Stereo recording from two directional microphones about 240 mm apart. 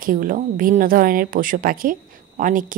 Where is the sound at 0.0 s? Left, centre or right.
Right.